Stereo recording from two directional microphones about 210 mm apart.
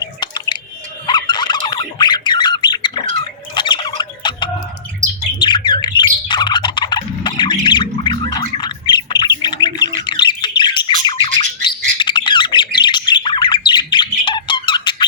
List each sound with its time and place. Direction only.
0.0 s drip: 20° left (ahead or behind)
1.0 s squawk: 20° left (ahead or behind)
5.4 s bird: 20° left (ahead or behind)
7.6 s gargling: 20° left (ahead or behind)
8.6 s bird: 20° left (ahead or behind)